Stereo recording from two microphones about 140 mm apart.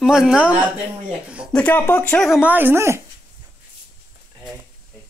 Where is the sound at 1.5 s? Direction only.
10° left (ahead or behind).